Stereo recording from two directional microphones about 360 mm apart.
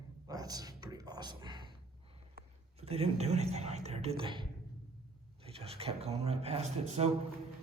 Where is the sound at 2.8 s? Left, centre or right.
Centre.